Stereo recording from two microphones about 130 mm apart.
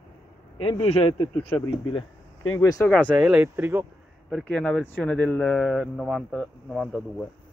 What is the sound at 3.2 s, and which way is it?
Speech, 10° right (ahead or behind).